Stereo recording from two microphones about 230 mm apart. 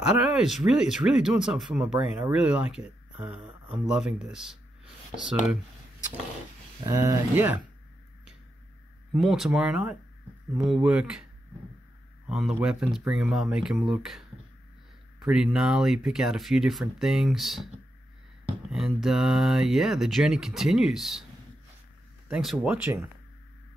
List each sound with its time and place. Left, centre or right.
0.0 s speech: centre
6.9 s speech: centre
9.1 s speech: centre
12.3 s speech: centre
18.7 s speech: centre
22.3 s speech: centre